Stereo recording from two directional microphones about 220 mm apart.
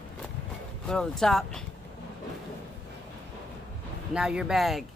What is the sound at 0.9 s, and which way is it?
Speech, 5° left (ahead or behind).